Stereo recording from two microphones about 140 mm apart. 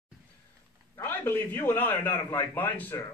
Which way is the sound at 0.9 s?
15° left (ahead or behind).